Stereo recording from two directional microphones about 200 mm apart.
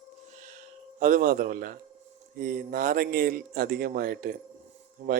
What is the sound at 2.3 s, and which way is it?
Speech, 45° right (ahead or behind).